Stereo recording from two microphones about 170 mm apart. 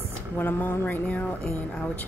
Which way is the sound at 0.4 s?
10° left (ahead or behind).